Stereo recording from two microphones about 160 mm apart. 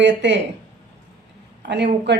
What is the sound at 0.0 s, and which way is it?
Speech, 90° right.